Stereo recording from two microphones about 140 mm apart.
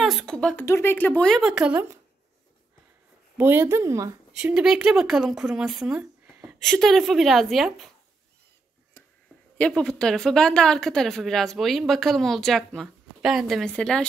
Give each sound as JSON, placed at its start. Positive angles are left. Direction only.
{"t": 0.0, "sound": "a sound", "side_deg": 0}
{"t": 0.7, "sound": "speech", "side_deg": 15}
{"t": 3.3, "sound": "a woman's voice", "side_deg": -15}
{"t": 4.3, "sound": "a woman's voice", "side_deg": -5}
{"t": 9.6, "sound": "a woman's voice", "side_deg": 5}